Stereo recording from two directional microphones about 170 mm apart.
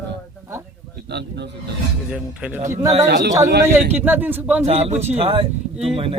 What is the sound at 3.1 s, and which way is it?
Speech, 75° right (ahead or behind).